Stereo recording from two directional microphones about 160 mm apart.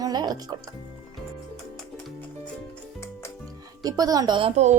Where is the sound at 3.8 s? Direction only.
25° right (ahead or behind).